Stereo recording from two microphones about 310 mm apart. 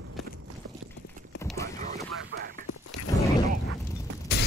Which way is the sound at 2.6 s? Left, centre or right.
Left.